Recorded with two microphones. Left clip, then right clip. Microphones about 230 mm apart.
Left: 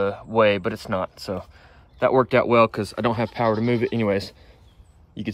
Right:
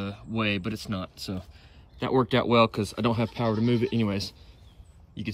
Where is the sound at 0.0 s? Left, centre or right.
Centre.